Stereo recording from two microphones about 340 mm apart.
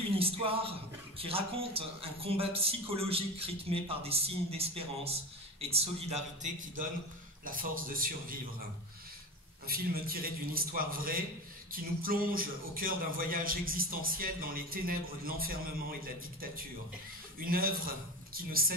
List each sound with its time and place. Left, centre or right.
0.2 s a man's voice: centre
9.7 s a man's voice: right
17.5 s a man's voice: right